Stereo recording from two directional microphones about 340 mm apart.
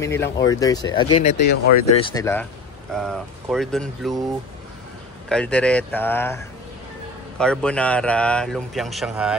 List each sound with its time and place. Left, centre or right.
0.0 s speech: centre
1.1 s speech: left
2.0 s a man's voice: centre
5.3 s a man's voice: centre